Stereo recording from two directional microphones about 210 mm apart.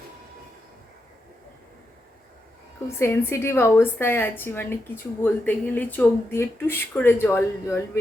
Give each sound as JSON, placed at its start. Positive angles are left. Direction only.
{"t": 3.0, "sound": "speech", "side_deg": 10}